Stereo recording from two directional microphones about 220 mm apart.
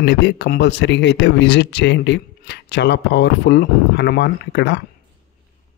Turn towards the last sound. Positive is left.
turn(degrees=50)  # may be behind; listen again after turning